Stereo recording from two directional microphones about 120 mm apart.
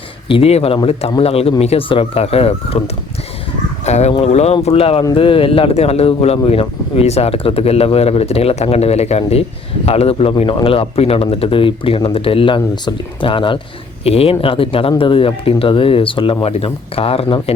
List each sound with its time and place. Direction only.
0.3 s a man's voice: 50° left (ahead or behind)
14.0 s a man's voice: 55° left (ahead or behind)